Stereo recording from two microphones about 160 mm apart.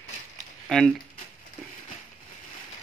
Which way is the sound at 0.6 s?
5° left (ahead or behind).